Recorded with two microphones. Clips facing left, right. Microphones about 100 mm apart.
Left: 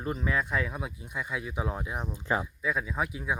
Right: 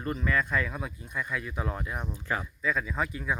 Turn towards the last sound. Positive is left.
turn(degrees=10)  # may be behind; listen again after turning